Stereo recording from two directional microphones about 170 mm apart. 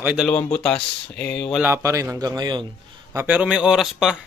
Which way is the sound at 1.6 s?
15° right (ahead or behind).